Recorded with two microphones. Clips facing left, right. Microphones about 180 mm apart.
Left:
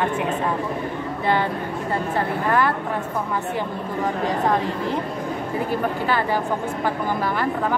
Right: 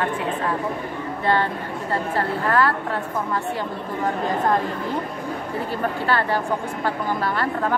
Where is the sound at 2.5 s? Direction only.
15° left (ahead or behind).